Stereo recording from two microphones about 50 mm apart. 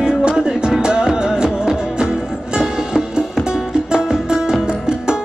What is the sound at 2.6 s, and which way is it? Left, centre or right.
Music, centre.